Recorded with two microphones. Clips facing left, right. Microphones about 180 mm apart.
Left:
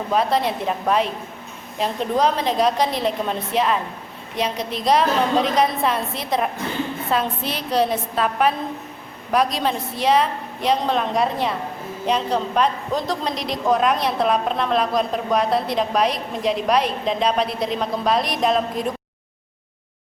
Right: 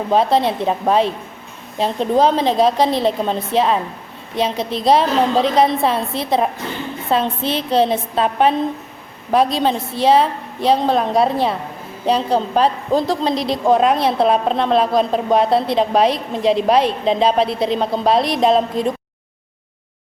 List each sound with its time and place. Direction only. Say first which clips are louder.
0.1 s a woman's voice: right 5 dB; 30° right (ahead or behind)